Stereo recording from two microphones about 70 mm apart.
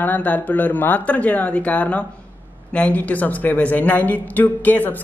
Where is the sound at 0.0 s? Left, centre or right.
Left.